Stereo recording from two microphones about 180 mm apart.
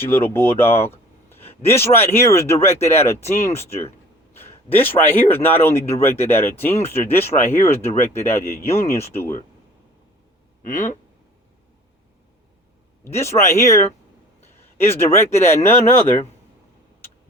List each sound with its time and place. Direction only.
0.0 s a man's voice: 10° left (ahead or behind)
10.6 s speech: 45° left (ahead or behind)
13.1 s a man's voice: 15° left (ahead or behind)